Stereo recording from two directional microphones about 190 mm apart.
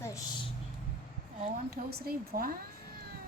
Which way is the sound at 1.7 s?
50° right (ahead or behind).